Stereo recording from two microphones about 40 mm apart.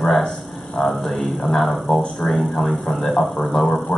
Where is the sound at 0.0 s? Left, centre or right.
Centre.